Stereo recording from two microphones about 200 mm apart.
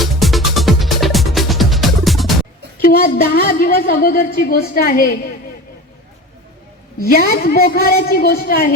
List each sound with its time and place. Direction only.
0.0 s music: centre (ahead or behind)
2.8 s a woman's voice: 50° left (ahead or behind)
7.0 s a woman's voice: 50° left (ahead or behind)